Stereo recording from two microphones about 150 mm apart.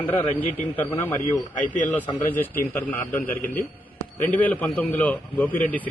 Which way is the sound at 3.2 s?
70° left (ahead or behind).